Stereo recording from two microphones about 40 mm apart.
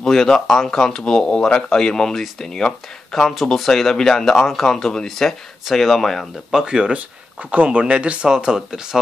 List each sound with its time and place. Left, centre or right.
0.0 s speech: centre
5.0 s speech: centre
6.5 s speech: centre
7.5 s speech: right
7.8 s speech: right
8.3 s speech: centre